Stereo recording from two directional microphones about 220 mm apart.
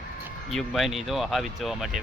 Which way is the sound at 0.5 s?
Centre (ahead or behind).